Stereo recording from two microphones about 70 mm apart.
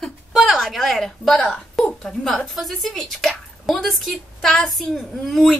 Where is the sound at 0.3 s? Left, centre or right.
Centre.